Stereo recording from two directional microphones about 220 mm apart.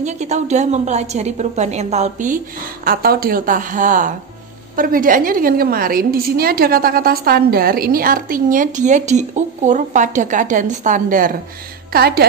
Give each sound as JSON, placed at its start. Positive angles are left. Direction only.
{"t": 0.0, "sound": "a woman's voice", "side_deg": -30}